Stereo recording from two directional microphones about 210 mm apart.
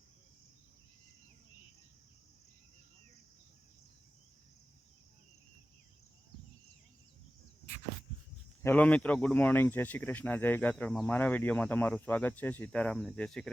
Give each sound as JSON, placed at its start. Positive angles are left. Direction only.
{"t": 8.6, "sound": "speech", "side_deg": 5}